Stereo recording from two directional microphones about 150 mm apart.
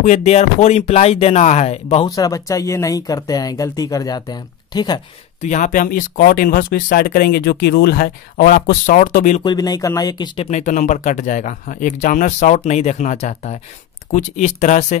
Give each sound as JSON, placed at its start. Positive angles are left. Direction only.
{"t": 0.0, "sound": "speech", "side_deg": 50}
{"t": 2.0, "sound": "speech", "side_deg": 25}
{"t": 5.4, "sound": "speech", "side_deg": 55}
{"t": 9.4, "sound": "speech", "side_deg": 30}
{"t": 10.4, "sound": "speech", "side_deg": 55}